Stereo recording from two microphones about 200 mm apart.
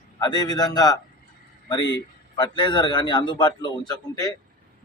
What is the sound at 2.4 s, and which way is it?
A man's voice, 25° left (ahead or behind).